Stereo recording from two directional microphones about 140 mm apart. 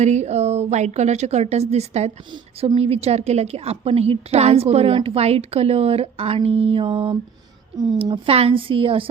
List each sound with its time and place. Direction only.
0.0 s a woman's voice: 55° right (ahead or behind)
2.3 s a woman's voice: 40° right (ahead or behind)